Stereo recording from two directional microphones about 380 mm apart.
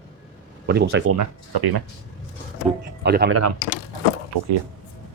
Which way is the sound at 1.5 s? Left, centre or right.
Right.